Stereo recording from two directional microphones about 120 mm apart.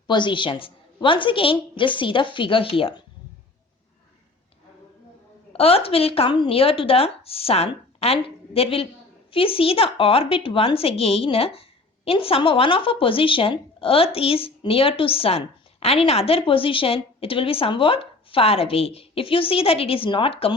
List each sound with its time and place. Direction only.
0.1 s a woman's voice: 40° left (ahead or behind)
5.5 s speech: 55° left (ahead or behind)